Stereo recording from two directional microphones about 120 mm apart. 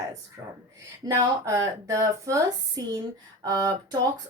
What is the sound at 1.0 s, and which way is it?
Speech, 35° right (ahead or behind).